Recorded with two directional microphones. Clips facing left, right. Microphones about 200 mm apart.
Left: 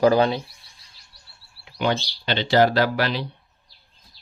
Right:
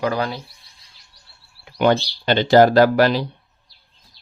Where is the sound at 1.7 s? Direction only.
50° right (ahead or behind).